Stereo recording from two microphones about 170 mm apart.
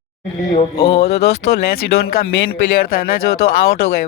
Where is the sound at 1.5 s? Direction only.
70° left (ahead or behind).